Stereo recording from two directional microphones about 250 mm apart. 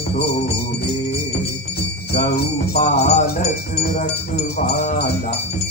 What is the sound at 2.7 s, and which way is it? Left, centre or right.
Jingle bell, left.